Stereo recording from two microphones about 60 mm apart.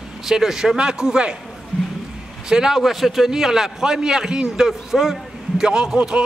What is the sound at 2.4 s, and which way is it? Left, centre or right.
Speech, centre.